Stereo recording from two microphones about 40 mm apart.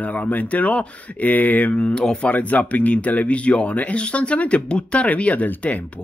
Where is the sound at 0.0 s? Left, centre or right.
Left.